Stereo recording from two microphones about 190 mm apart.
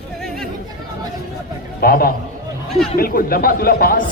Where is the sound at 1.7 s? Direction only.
50° left (ahead or behind).